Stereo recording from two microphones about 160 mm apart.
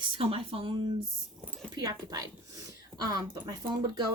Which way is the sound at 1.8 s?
20° right (ahead or behind).